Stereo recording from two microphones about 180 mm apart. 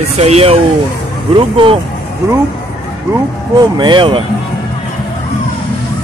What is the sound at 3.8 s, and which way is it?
Speech, 25° right (ahead or behind).